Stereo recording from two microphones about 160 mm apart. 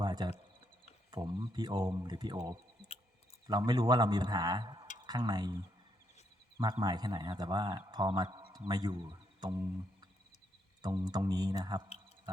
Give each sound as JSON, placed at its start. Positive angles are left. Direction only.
{"t": 0.0, "sound": "a sound", "side_deg": -25}
{"t": 1.1, "sound": "a man's voice", "side_deg": -30}
{"t": 6.8, "sound": "a man's voice", "side_deg": -25}
{"t": 10.8, "sound": "a man's voice", "side_deg": -25}